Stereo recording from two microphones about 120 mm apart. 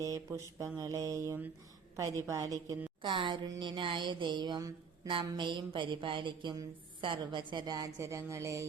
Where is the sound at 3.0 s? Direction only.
45° right (ahead or behind); by 8.7 s 25° right (ahead or behind).